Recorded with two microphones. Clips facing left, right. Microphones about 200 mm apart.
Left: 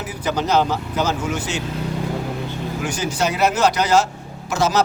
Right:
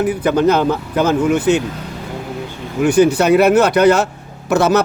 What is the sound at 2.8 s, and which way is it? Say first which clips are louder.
A man's voice: right 12 dB; 60° right (ahead or behind).